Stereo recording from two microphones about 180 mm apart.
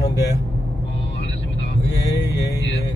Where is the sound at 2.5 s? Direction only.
75° left (ahead or behind).